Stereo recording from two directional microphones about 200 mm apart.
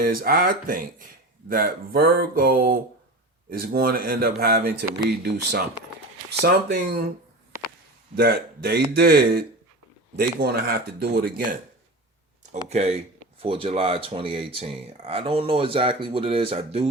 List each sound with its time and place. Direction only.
0.0 s speech: 45° right (ahead or behind)
8.1 s speech: 50° right (ahead or behind)
12.5 s speech: 35° right (ahead or behind)